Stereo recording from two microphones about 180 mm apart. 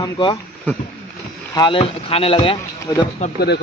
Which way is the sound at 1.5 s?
25° left (ahead or behind).